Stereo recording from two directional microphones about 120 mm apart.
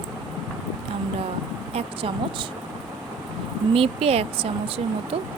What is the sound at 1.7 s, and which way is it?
Speech, 50° right (ahead or behind).